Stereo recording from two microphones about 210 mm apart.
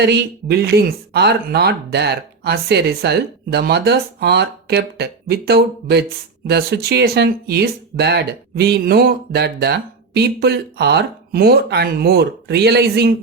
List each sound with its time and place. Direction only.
0.0 s speech: 50° right (ahead or behind)